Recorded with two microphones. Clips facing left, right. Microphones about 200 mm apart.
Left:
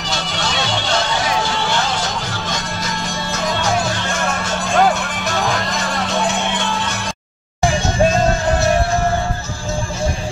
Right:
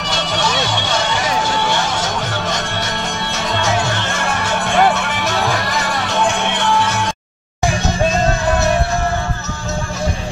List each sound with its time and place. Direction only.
3.3 s music: 70° right (ahead or behind)